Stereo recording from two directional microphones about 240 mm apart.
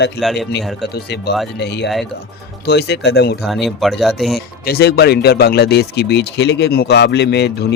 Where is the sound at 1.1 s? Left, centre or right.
Left.